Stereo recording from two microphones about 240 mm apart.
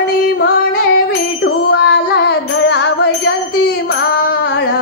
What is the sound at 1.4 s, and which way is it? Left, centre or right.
Music, left.